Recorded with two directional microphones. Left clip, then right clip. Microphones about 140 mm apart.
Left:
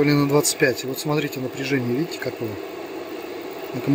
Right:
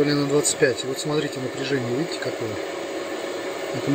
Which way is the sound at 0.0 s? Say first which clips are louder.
Left 2 dB; 20° left (ahead or behind).